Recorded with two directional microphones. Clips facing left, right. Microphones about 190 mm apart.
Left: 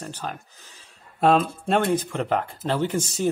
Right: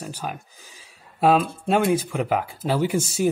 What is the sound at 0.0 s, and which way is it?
Speech, 10° right (ahead or behind).